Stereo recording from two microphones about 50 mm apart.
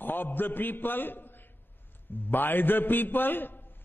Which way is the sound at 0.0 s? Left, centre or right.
Left.